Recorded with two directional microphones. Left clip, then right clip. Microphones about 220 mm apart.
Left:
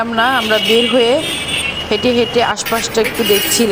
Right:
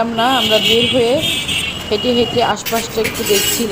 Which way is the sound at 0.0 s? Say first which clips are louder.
Left 1 dB; 15° left (ahead or behind).